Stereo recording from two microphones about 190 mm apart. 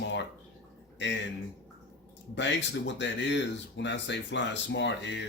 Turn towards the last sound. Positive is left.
turn(degrees=70)  # may be behind; listen again after turning